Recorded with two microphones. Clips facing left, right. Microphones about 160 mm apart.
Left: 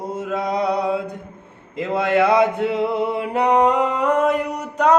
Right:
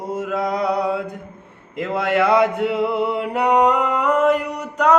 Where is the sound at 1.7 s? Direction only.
20° left (ahead or behind).